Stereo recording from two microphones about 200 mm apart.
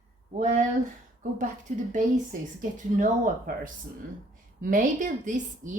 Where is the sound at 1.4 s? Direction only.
40° right (ahead or behind).